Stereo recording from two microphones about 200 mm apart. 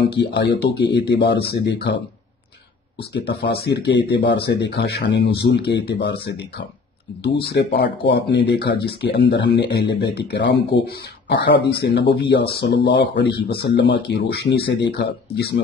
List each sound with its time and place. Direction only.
0.0 s speech: 55° left (ahead or behind)
3.1 s speech: 55° left (ahead or behind)
7.4 s speech: 55° left (ahead or behind)